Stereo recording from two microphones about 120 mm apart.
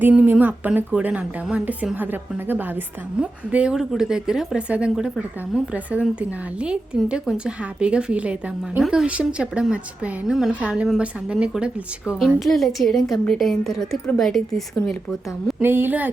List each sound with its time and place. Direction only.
0.0 s a woman's voice: 15° right (ahead or behind); by 14.6 s 5° left (ahead or behind)
15.6 s a woman's voice: 20° right (ahead or behind)